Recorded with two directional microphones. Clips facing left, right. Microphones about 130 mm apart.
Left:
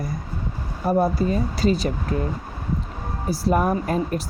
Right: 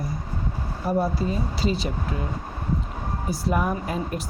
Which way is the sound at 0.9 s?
50° left (ahead or behind).